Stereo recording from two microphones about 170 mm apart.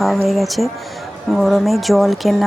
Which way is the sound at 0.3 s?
Centre (ahead or behind).